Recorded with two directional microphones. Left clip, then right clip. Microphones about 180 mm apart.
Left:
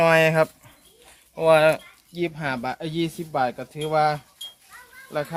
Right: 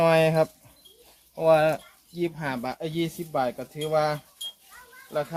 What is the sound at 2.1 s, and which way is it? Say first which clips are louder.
Speech: left 3 dB; 60° left (ahead or behind).